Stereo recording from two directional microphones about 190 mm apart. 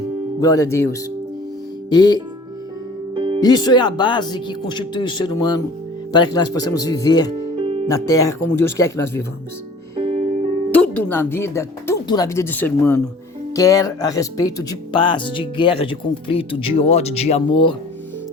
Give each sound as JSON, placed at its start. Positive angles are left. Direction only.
{"t": 0.3, "sound": "speech", "side_deg": 15}
{"t": 3.2, "sound": "music", "side_deg": -25}
{"t": 3.4, "sound": "speech", "side_deg": 20}
{"t": 7.3, "sound": "music", "side_deg": -30}
{"t": 7.9, "sound": "speech", "side_deg": 15}
{"t": 10.0, "sound": "music", "side_deg": -30}
{"t": 10.7, "sound": "speech", "side_deg": 10}